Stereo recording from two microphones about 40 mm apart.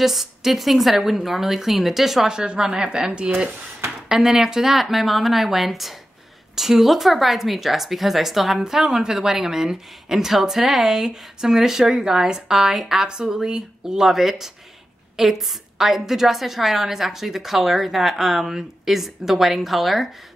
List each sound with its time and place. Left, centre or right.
0.0 s a woman's voice: centre
2.2 s speech: right
4.1 s a woman's voice: centre